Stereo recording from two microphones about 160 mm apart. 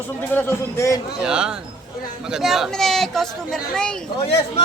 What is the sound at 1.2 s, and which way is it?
Speech, 5° right (ahead or behind).